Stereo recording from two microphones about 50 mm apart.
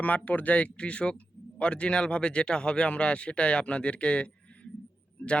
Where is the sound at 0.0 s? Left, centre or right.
Left.